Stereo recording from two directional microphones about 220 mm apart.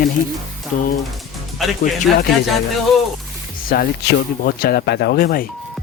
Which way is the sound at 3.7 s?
45° left (ahead or behind).